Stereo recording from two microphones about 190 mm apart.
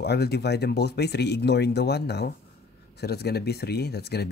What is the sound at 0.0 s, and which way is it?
Speech, 60° left (ahead or behind).